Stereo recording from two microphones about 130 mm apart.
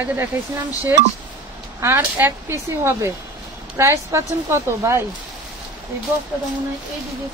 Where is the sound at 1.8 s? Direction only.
20° right (ahead or behind).